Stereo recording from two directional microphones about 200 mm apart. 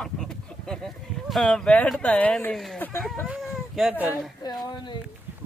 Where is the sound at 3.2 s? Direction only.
5° right (ahead or behind).